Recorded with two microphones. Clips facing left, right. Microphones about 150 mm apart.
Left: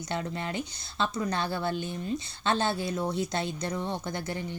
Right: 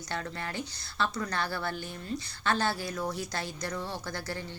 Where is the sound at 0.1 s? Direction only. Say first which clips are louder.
Left 3 dB; 20° left (ahead or behind).